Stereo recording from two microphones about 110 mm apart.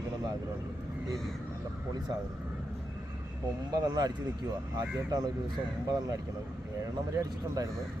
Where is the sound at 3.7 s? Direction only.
35° right (ahead or behind).